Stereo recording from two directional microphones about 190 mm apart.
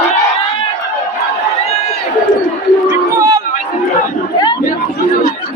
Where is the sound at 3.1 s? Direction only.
15° right (ahead or behind).